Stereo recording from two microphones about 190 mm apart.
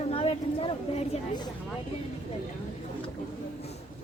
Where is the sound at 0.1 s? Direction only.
30° left (ahead or behind).